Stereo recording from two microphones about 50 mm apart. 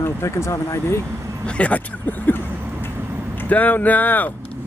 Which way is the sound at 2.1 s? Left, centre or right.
Left.